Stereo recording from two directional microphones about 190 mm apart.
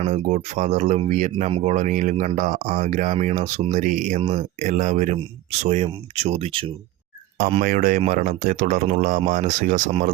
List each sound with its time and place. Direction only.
0.0 s speech: 35° right (ahead or behind)
4.2 s speech: 30° right (ahead or behind)
7.6 s speech: 45° right (ahead or behind)